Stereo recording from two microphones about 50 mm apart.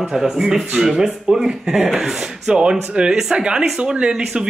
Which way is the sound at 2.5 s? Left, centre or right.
Centre.